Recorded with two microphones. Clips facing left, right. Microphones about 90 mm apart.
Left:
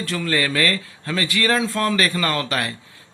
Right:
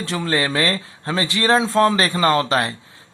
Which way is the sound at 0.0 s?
25° right (ahead or behind).